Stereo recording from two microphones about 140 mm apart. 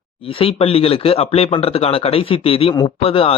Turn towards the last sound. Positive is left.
turn(degrees=40)  # may be behind; listen again after turning